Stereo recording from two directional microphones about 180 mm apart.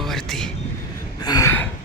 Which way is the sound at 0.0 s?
Centre (ahead or behind).